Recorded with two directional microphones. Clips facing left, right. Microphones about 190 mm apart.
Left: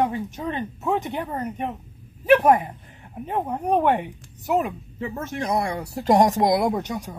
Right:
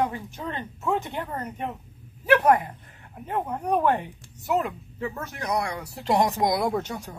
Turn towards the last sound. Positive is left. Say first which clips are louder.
# left 3 dB
turn(degrees=15)  # may be behind; listen again after turning